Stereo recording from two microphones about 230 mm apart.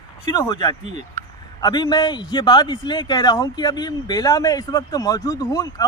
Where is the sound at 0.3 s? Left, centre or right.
Centre.